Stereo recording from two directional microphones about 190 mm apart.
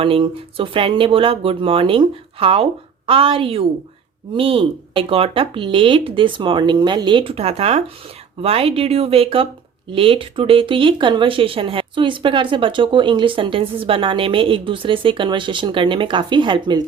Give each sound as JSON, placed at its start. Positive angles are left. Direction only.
{"t": 0.0, "sound": "speech", "side_deg": -30}